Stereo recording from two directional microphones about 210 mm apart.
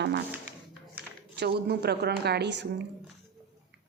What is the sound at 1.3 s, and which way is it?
A woman's voice, 50° right (ahead or behind).